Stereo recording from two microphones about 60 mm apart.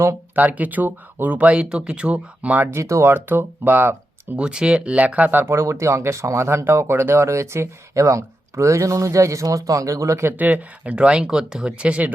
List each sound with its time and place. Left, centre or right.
0.3 s speech: right
2.6 s speech: right
3.1 s speech: right
4.4 s speech: centre
5.4 s speech: right
7.3 s speech: right
10.2 s speech: right